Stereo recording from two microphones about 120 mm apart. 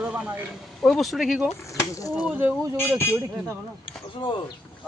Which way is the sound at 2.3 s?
15° right (ahead or behind).